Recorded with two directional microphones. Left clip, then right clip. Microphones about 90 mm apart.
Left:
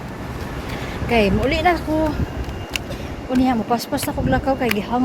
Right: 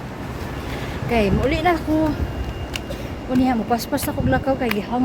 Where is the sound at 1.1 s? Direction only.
10° left (ahead or behind).